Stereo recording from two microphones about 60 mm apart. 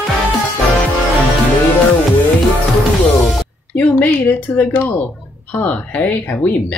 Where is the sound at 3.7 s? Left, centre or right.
Left.